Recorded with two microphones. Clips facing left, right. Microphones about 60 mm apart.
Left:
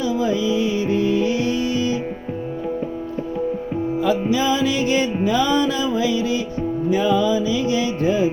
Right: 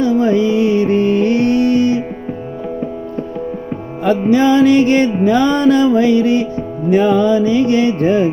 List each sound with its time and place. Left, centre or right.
0.0 s music: right
4.3 s music: right